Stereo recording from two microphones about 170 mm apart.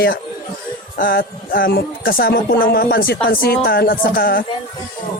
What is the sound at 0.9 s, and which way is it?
Speech, 60° left (ahead or behind).